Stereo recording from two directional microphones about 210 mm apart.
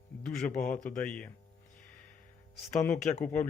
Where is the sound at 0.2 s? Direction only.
5° left (ahead or behind).